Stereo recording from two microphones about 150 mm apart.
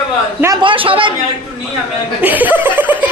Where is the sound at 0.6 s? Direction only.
35° right (ahead or behind).